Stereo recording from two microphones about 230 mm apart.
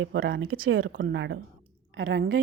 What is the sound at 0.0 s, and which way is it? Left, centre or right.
Speech, right.